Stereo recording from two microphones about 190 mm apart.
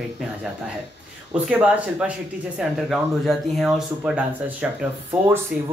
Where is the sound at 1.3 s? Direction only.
5° right (ahead or behind).